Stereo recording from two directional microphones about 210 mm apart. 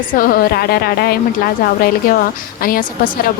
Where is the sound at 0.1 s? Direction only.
45° left (ahead or behind).